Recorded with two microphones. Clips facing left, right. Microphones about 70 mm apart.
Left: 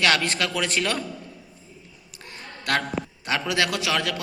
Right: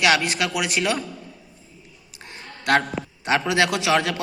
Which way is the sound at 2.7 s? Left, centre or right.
Right.